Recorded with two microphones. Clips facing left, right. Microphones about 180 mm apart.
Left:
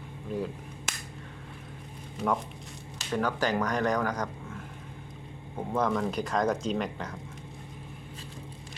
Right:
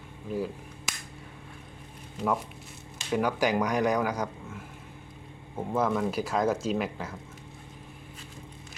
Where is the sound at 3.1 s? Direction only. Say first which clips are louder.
Right 2 dB; 10° right (ahead or behind).